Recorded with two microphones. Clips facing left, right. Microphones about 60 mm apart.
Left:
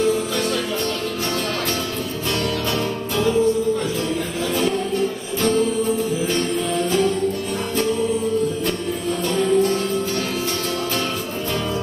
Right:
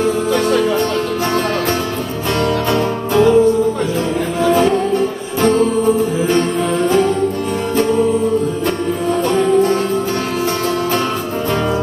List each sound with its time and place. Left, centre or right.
0.0 s music: right
2.4 s music: right
4.4 s music: right
9.3 s music: right